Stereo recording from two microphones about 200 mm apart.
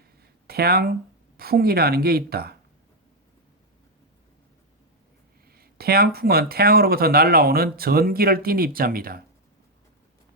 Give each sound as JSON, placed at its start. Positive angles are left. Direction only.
{"t": 0.2, "sound": "a sound", "side_deg": -50}
{"t": 1.4, "sound": "speech", "side_deg": -50}
{"t": 5.5, "sound": "speech", "side_deg": -50}